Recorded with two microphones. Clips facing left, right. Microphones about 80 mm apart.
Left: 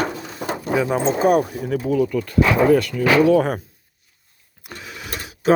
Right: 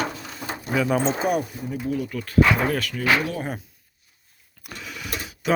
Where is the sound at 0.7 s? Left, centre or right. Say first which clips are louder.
Left 2 dB; left.